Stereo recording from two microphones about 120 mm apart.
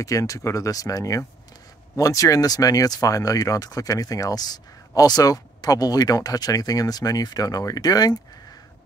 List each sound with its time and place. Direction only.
0.0 s speech: 25° left (ahead or behind)